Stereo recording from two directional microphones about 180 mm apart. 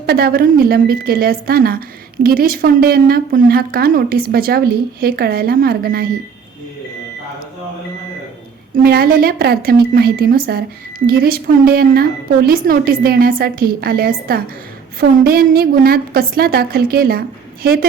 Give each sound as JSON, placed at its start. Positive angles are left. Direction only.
{"t": 0.0, "sound": "a woman's voice", "side_deg": -60}
{"t": 8.7, "sound": "a woman's voice", "side_deg": -55}